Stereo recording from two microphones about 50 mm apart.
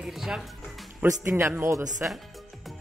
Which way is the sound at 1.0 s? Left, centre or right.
Right.